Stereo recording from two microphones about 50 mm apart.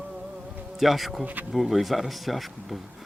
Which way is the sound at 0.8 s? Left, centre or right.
Centre.